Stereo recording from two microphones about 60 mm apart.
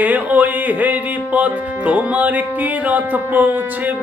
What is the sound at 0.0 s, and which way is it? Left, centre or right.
Speech, right.